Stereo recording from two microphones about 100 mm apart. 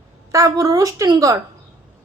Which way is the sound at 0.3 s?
35° right (ahead or behind).